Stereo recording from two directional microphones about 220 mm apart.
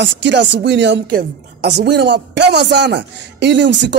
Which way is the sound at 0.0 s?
50° right (ahead or behind).